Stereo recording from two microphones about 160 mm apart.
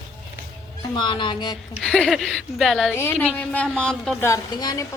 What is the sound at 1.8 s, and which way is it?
Speech, 5° left (ahead or behind).